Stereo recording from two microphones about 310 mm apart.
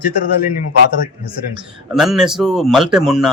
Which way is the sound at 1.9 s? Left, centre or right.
Centre.